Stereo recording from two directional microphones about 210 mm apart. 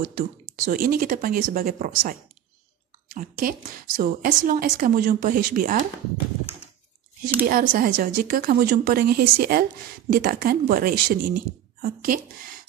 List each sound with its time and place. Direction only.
0.0 s a woman's voice: 45° right (ahead or behind)
7.4 s a woman's voice: 45° right (ahead or behind)